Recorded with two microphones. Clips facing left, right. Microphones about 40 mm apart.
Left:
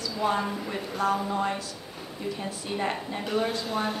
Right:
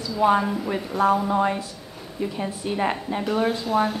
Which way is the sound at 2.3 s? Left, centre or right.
Centre.